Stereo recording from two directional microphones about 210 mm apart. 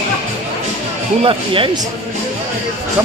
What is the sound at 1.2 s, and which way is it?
Speech, 25° right (ahead or behind).